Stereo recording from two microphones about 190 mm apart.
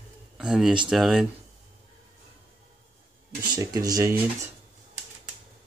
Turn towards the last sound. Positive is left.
turn(degrees=-15)  # may be behind; listen again after turning